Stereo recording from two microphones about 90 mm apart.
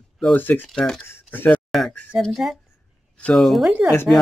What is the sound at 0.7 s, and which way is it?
Speech, 5° left (ahead or behind).